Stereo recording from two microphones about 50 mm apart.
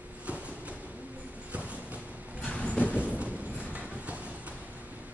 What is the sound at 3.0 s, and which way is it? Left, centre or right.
Train, right.